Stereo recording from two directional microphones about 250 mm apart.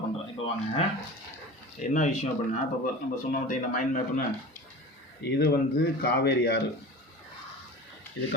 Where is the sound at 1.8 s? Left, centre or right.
Left.